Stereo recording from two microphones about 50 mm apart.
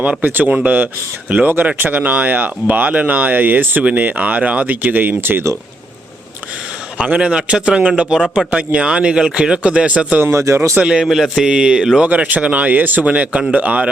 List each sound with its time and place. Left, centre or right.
0.2 s speech: right
2.2 s speech: right
3.8 s speech: right
7.1 s speech: centre
10.3 s speech: right
11.0 s speech: centre
12.0 s speech: right
13.1 s speech: right